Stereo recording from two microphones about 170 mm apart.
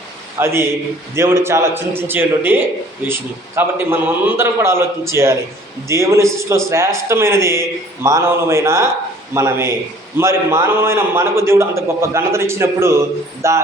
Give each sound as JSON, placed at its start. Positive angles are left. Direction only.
{"t": 0.3, "sound": "a man's voice", "side_deg": -15}